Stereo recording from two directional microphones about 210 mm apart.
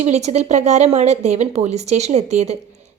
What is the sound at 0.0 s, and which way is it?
A woman's voice, 30° right (ahead or behind).